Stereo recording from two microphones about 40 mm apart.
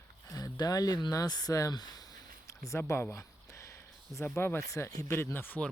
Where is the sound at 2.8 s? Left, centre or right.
Left.